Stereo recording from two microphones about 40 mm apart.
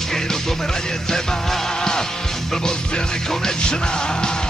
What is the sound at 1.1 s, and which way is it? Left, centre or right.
Music, centre.